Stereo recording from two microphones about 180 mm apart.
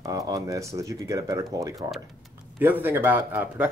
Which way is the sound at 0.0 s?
20° right (ahead or behind).